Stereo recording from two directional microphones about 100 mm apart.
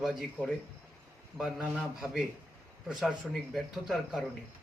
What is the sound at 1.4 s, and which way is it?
A man's voice, 5° right (ahead or behind).